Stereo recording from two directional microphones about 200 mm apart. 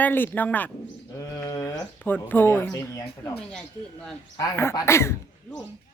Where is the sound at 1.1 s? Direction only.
20° left (ahead or behind).